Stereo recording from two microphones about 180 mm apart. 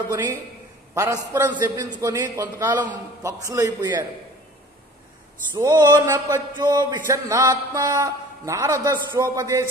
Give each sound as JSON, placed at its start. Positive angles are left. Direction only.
{"t": 0.1, "sound": "a man's voice", "side_deg": -15}
{"t": 5.6, "sound": "speech", "side_deg": -20}